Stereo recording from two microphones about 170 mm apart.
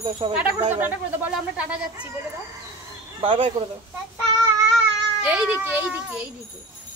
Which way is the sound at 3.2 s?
30° right (ahead or behind).